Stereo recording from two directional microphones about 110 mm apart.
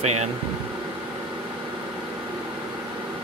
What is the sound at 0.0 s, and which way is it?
Speech, 90° right.